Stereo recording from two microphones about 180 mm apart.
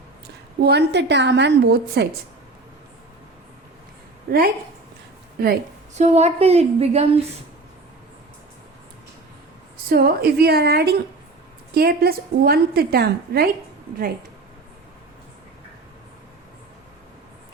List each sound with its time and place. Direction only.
0.6 s a woman's voice: 70° right (ahead or behind)
4.3 s a woman's voice: 60° right (ahead or behind)
5.9 s a woman's voice: 40° right (ahead or behind)
9.9 s a woman's voice: 60° right (ahead or behind)